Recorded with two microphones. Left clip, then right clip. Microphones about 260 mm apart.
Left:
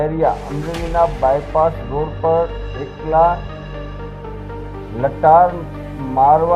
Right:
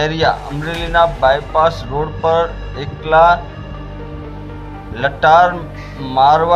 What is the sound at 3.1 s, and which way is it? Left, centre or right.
Speech, right.